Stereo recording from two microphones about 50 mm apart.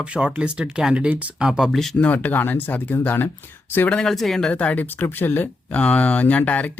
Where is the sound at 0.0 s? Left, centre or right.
Right.